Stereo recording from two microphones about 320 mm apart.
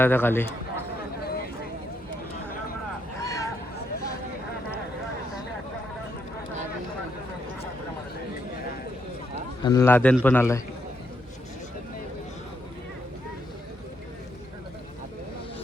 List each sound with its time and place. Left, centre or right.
0.0 s a man's voice: centre
3.2 s a sound: centre
9.6 s a man's voice: centre